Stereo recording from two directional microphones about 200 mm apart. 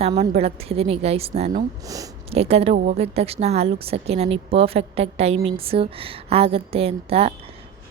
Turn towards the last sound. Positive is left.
turn(degrees=-30)  # may be behind; listen again after turning